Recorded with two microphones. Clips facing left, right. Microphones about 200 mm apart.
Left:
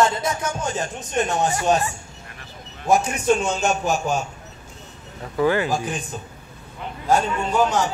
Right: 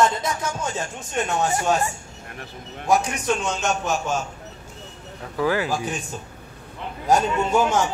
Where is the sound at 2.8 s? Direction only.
25° left (ahead or behind).